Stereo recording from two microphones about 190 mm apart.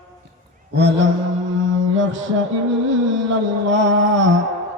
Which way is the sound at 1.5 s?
80° right.